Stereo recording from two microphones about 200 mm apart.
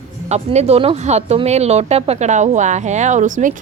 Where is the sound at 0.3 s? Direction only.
35° right (ahead or behind).